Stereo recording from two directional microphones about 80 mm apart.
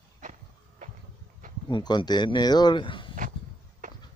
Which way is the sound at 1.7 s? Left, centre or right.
Left.